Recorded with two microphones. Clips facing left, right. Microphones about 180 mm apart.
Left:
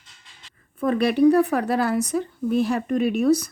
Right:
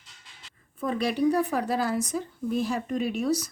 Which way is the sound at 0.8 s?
60° left (ahead or behind).